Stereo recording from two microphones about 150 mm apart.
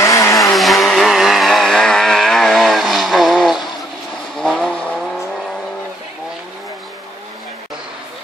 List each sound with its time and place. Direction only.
0.0 s vehicle: 20° left (ahead or behind)
0.4 s vehicle: centre (ahead or behind)